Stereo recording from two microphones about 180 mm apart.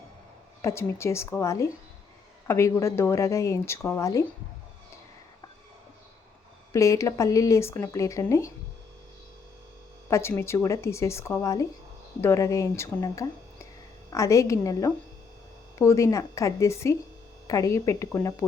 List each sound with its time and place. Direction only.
0.6 s speech: 15° left (ahead or behind)
6.7 s speech: 15° left (ahead or behind)
10.1 s speech: 15° left (ahead or behind)